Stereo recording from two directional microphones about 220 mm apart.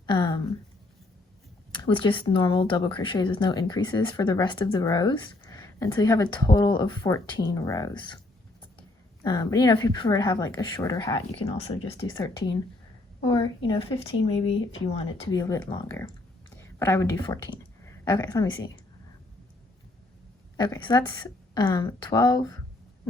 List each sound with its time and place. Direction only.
0.0 s a sound: 20° left (ahead or behind)
1.7 s speech: 20° left (ahead or behind)
9.2 s a woman's voice: 20° left (ahead or behind)
20.6 s a woman's voice: 20° left (ahead or behind)